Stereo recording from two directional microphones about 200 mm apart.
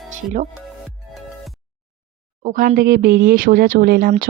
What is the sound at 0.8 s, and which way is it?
Music, centre (ahead or behind).